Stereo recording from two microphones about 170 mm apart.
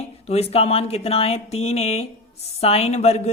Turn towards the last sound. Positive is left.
turn(degrees=35)  # may be behind; listen again after turning